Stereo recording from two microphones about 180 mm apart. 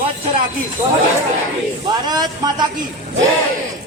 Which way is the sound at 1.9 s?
20° right (ahead or behind).